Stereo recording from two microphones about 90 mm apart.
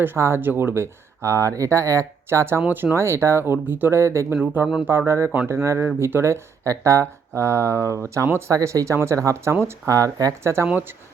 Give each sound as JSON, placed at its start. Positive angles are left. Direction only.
{"t": 0.0, "sound": "speech", "side_deg": -25}
{"t": 10.4, "sound": "speech", "side_deg": -30}
{"t": 10.7, "sound": "speech", "side_deg": -20}